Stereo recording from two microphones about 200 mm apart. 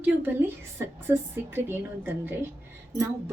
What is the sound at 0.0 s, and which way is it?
Speech, 10° right (ahead or behind).